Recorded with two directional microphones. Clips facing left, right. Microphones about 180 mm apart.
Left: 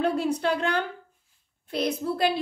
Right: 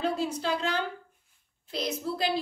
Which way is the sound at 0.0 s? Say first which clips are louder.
Left 5 dB; 60° left (ahead or behind).